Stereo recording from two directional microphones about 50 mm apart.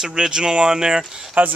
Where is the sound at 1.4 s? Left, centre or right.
Right.